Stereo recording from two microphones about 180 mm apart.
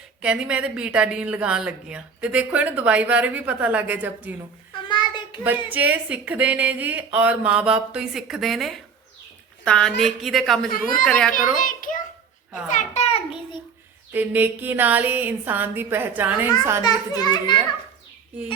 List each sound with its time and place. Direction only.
0.2 s a woman's voice: 5° right (ahead or behind)
4.9 s child singing: 25° left (ahead or behind)
5.6 s a woman's voice: 10° right (ahead or behind)
10.7 s a child's voice: 50° left (ahead or behind)
11.0 s speech: 5° left (ahead or behind)
11.3 s a child's voice: 50° left (ahead or behind)
12.6 s a sound: 40° left (ahead or behind)
14.1 s a woman's voice: 10° right (ahead or behind)
16.8 s a child's voice: 25° left (ahead or behind)